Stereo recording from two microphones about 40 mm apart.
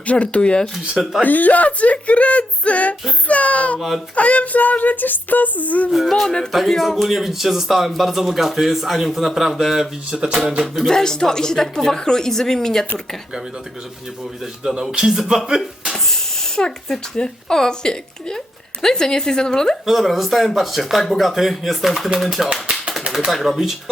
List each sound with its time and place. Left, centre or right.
0.0 s speech: left
1.2 s speech: left
3.8 s speech: centre
4.1 s speech: left
5.9 s speech: centre
6.2 s speech: centre
6.5 s speech: centre
10.1 s speech: right
10.8 s a woman's voice: centre
14.9 s speech: centre
16.6 s a woman's voice: centre
19.8 s speech: centre